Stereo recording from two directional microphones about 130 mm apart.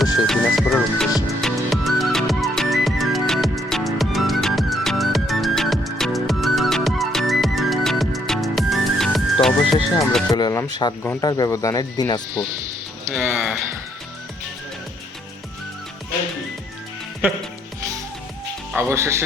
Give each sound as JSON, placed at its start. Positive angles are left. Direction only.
{"t": 0.0, "sound": "music", "side_deg": 0}
{"t": 10.3, "sound": "speech", "side_deg": 30}
{"t": 13.1, "sound": "music", "side_deg": -5}
{"t": 18.7, "sound": "speech", "side_deg": -15}